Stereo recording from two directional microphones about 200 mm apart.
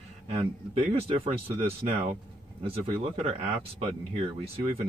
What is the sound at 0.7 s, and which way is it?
Speech, 30° right (ahead or behind).